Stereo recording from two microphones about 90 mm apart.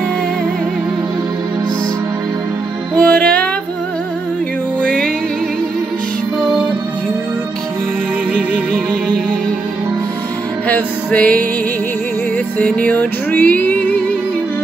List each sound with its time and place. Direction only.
3.0 s music: 15° left (ahead or behind)
4.8 s music: 10° left (ahead or behind)
10.7 s music: 15° left (ahead or behind)
12.5 s music: 15° left (ahead or behind)